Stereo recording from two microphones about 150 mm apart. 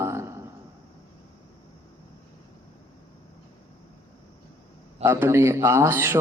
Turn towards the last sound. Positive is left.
turn(degrees=-15)  # may be behind; listen again after turning